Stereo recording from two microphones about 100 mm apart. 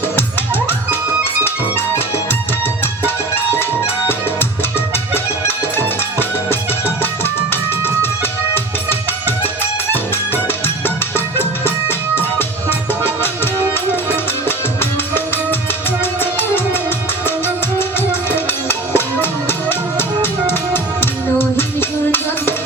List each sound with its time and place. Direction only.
5.1 s music: 20° left (ahead or behind)
10.8 s music: 20° left (ahead or behind)
14.4 s music: 25° left (ahead or behind)
16.2 s music: 20° left (ahead or behind)